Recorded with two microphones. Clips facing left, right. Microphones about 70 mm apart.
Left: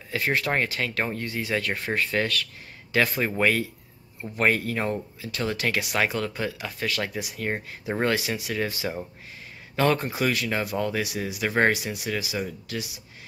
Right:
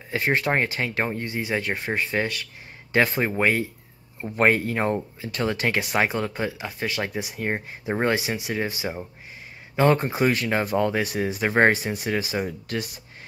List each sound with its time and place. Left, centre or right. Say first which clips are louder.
0.1 s speech: right 2 dB; right
2.9 s speech: right 2 dB; right
3.3 s speech: right 1 dB; right
4.2 s speech: right 3 dB; right